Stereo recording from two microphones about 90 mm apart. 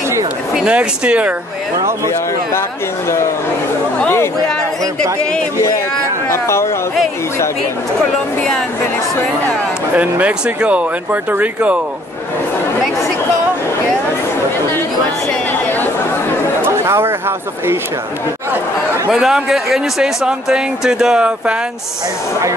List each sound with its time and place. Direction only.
0.7 s speech: 15° right (ahead or behind)
6.2 s speech: 30° left (ahead or behind)
9.9 s speech: 15° right (ahead or behind)
16.6 s chatter: 30° right (ahead or behind)
19.0 s speech: 5° right (ahead or behind)